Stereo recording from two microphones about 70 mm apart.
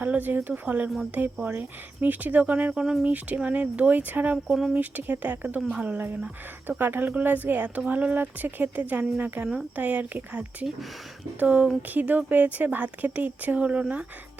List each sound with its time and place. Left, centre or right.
0.0 s speech: right
4.4 s speech: centre
4.7 s speech: right